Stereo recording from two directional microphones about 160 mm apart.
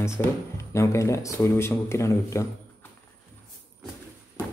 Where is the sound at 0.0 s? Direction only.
15° left (ahead or behind).